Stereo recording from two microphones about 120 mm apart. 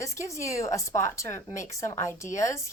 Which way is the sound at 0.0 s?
25° left (ahead or behind).